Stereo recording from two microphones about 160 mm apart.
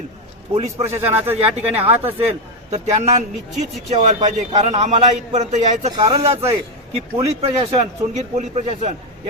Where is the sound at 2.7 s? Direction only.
45° right (ahead or behind).